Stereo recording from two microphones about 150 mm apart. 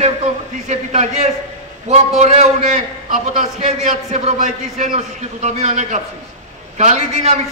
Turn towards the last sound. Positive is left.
turn(degrees=-50)  # may be behind; listen again after turning